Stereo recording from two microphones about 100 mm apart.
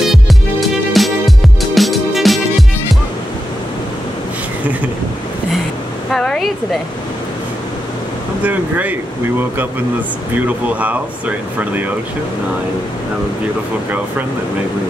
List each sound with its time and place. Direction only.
0.0 s music: centre (ahead or behind)
6.1 s a sound: 5° left (ahead or behind)
8.5 s speech: 15° right (ahead or behind)
10.3 s speech: 15° right (ahead or behind)